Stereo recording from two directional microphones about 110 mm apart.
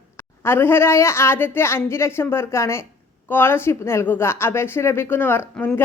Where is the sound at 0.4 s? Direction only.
20° left (ahead or behind).